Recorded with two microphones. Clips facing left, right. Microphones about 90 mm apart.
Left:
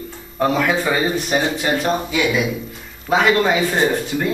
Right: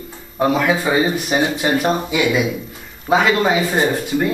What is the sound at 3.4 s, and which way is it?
Speech, 10° right (ahead or behind).